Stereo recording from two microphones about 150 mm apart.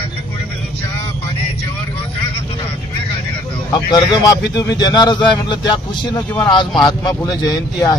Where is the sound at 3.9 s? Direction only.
25° left (ahead or behind).